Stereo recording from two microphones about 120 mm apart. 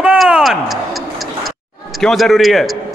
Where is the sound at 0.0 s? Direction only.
10° right (ahead or behind).